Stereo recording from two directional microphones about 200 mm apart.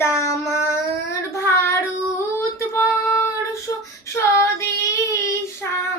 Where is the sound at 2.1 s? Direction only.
15° left (ahead or behind).